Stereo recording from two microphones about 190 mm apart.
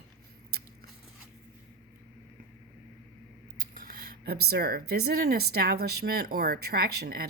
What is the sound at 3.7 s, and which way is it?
Speech, 50° right (ahead or behind).